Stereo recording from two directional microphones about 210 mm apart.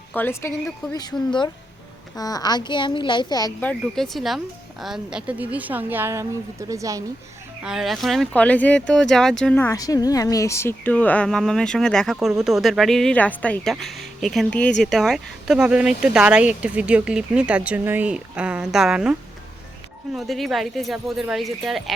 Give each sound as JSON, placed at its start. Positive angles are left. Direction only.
{"t": 0.1, "sound": "speech", "side_deg": 10}
{"t": 3.6, "sound": "a woman's voice", "side_deg": 5}
{"t": 7.6, "sound": "speech", "side_deg": 0}
{"t": 20.1, "sound": "speech", "side_deg": 0}